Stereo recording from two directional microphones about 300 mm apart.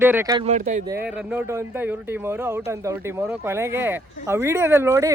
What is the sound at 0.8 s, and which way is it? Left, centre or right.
Speech, centre.